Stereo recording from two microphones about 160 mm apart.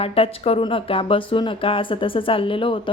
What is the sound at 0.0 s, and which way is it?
A woman's voice, 35° left (ahead or behind).